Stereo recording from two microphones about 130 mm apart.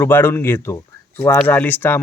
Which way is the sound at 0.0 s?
15° left (ahead or behind).